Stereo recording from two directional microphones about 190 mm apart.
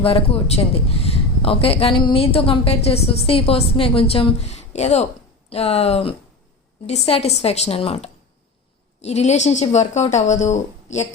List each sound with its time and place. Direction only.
0.0 s a woman's voice: 30° left (ahead or behind)